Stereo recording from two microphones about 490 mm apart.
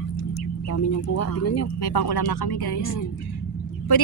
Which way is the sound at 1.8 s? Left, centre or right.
Left.